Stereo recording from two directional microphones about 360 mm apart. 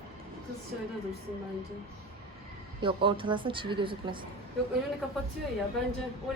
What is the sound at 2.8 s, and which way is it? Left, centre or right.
Speech, centre.